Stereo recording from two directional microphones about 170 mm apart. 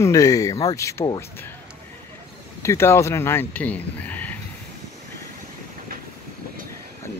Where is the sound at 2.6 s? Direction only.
15° left (ahead or behind).